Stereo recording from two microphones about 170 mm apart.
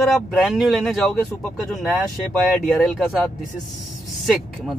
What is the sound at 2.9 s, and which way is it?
Speech, centre (ahead or behind).